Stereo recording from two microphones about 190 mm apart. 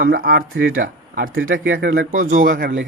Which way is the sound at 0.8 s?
45° right (ahead or behind).